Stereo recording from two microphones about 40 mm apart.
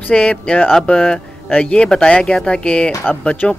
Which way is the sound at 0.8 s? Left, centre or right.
Left.